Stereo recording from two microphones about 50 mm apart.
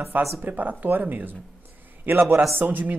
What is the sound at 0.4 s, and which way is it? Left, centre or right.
Speech, right.